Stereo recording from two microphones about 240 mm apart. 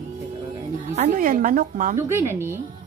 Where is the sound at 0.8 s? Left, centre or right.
Right.